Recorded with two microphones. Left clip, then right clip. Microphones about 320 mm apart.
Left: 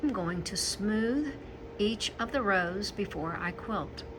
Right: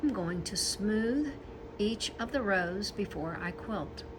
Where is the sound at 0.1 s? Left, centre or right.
Centre.